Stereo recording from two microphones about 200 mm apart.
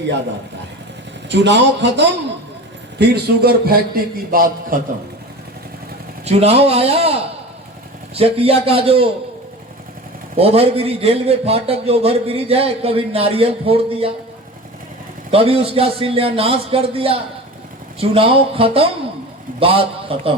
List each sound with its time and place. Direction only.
1.3 s speech: 60° right (ahead or behind)
3.0 s a man's voice: 50° right (ahead or behind)
6.2 s a man's voice: 30° right (ahead or behind)
10.3 s a man's voice: 30° right (ahead or behind)
15.3 s a man's voice: 30° right (ahead or behind)